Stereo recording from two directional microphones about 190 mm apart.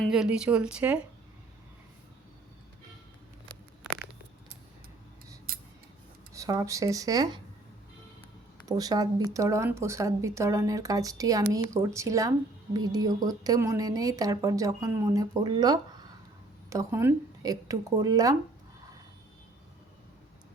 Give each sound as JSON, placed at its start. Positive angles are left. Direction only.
{"t": 0.0, "sound": "speech", "side_deg": -5}
{"t": 5.5, "sound": "scissors", "side_deg": -50}
{"t": 6.3, "sound": "a woman's voice", "side_deg": -20}
{"t": 8.6, "sound": "a woman's voice", "side_deg": -20}